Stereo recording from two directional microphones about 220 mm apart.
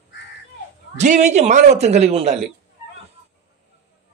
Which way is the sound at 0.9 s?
30° right (ahead or behind).